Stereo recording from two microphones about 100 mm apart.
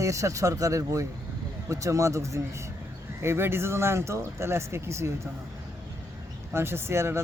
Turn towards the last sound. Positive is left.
turn(degrees=-25)  # may be behind; listen again after turning